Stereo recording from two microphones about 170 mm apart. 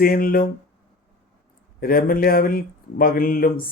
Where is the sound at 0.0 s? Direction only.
60° left (ahead or behind).